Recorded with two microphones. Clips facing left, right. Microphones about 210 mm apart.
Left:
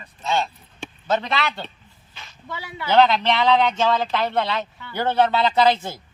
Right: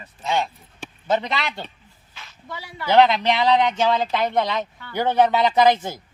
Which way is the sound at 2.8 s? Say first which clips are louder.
Right 1 dB; 20° right (ahead or behind).